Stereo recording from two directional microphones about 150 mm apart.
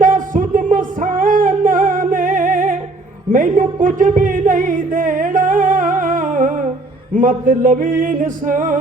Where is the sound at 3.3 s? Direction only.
60° right (ahead or behind).